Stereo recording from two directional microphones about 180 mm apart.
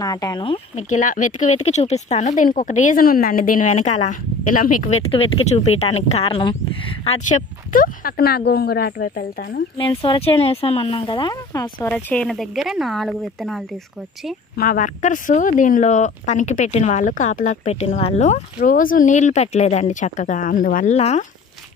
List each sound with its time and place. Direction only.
0.0 s speech: 20° left (ahead or behind)
0.8 s speech: 45° left (ahead or behind); by 7.2 s 30° left (ahead or behind)
7.2 s speech: 45° left (ahead or behind)
9.8 s speech: 30° left (ahead or behind)
11.9 s speech: 5° left (ahead or behind)
14.6 s speech: 50° left (ahead or behind)
18.6 s speech: 50° left (ahead or behind)